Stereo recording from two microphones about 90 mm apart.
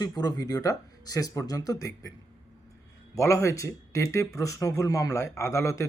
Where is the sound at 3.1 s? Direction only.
35° left (ahead or behind).